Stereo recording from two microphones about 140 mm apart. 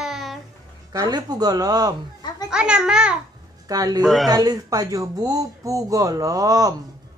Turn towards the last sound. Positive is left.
turn(degrees=-25)  # may be behind; listen again after turning